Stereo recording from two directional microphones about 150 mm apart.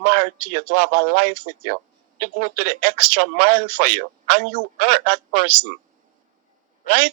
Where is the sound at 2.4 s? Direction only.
70° left (ahead or behind).